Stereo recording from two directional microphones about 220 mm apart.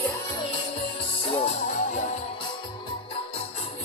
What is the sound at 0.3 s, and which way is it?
Music, 25° left (ahead or behind).